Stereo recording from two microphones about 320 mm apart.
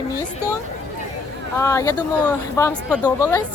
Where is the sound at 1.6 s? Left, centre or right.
Centre.